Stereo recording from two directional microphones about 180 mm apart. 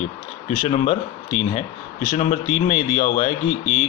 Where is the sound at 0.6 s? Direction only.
40° left (ahead or behind).